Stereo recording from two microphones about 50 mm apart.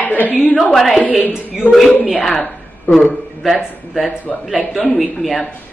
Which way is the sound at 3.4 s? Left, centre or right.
Centre.